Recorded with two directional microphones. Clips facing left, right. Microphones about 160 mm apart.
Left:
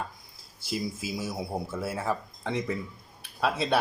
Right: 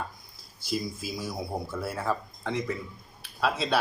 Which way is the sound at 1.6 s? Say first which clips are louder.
Right 1 dB; 25° left (ahead or behind).